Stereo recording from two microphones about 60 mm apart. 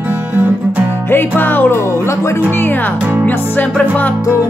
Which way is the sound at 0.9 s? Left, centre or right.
Left.